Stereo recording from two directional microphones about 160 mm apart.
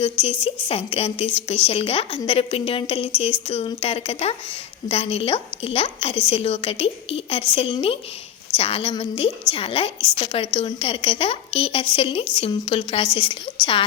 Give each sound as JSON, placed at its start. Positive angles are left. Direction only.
{"t": 0.0, "sound": "a woman's voice", "side_deg": 35}